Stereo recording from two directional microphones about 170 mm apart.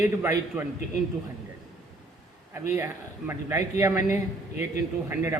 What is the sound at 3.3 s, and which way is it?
A man's voice, 15° right (ahead or behind).